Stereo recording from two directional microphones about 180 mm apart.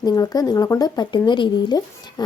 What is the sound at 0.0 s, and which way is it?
A woman's voice, 20° left (ahead or behind).